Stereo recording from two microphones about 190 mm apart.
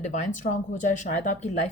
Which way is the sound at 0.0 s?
40° left (ahead or behind).